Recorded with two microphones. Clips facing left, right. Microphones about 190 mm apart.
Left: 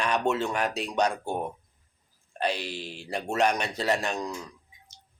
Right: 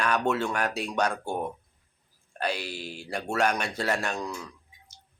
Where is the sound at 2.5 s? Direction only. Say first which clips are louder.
Even; 10° right (ahead or behind).